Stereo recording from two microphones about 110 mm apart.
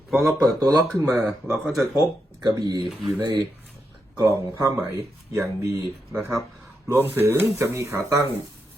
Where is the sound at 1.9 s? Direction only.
40° right (ahead or behind).